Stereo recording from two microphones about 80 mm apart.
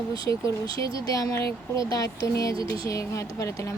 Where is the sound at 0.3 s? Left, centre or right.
Left.